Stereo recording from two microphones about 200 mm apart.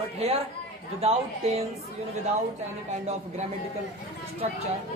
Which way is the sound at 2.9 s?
35° right (ahead or behind).